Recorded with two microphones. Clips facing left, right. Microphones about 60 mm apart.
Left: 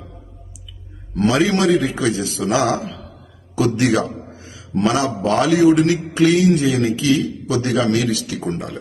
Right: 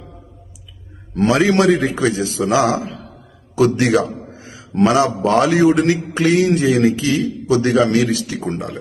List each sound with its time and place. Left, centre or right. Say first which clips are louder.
1.1 s a man's voice: right 2 dB; right
4.4 s a sound: right 6 dB; right
5.0 s a man's voice: right 2 dB; right